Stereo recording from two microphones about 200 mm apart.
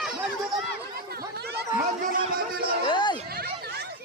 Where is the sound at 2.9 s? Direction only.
25° left (ahead or behind).